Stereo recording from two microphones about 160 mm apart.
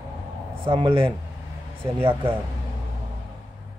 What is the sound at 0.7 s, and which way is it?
Speech, 30° right (ahead or behind).